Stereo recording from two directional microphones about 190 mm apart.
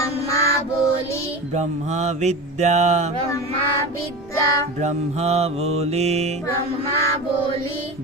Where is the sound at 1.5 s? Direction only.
35° right (ahead or behind).